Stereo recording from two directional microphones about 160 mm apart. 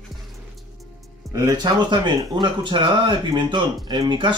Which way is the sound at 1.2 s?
20° right (ahead or behind).